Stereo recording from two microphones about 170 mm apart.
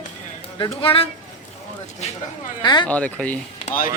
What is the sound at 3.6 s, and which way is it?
Speech, 55° left (ahead or behind).